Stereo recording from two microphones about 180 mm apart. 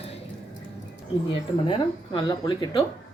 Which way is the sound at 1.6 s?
25° left (ahead or behind).